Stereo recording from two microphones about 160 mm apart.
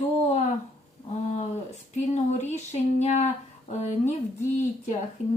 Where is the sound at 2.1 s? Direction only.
45° left (ahead or behind).